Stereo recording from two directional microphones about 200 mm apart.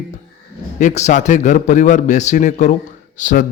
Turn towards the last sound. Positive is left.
turn(degrees=40)  # may be behind; listen again after turning